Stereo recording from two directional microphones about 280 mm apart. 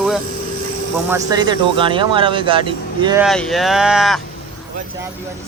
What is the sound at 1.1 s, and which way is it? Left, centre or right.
Speech, centre.